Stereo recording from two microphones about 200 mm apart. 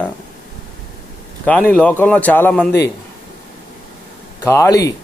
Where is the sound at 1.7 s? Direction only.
5° left (ahead or behind).